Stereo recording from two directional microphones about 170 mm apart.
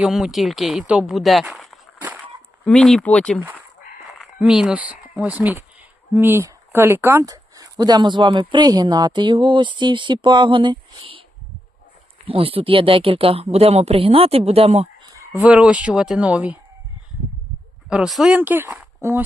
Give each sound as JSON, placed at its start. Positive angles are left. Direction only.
{"t": 0.0, "sound": "speech", "side_deg": 0}
{"t": 2.0, "sound": "a sound", "side_deg": -10}
{"t": 2.6, "sound": "speech", "side_deg": 5}
{"t": 4.4, "sound": "speech", "side_deg": -5}
{"t": 12.3, "sound": "speech", "side_deg": -35}
{"t": 15.3, "sound": "speech", "side_deg": -5}
{"t": 17.8, "sound": "speech", "side_deg": -5}